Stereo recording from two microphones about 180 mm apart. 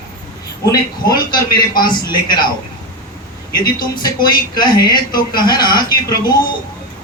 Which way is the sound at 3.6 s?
25° left (ahead or behind).